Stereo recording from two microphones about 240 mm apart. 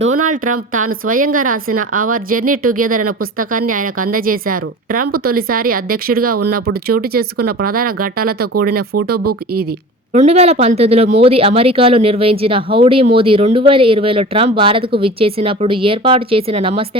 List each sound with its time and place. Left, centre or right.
0.0 s a sound: right
0.7 s speech: right
10.1 s speech: right